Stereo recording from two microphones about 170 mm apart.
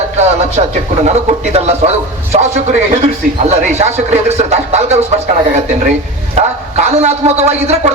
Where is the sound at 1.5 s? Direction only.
40° right (ahead or behind).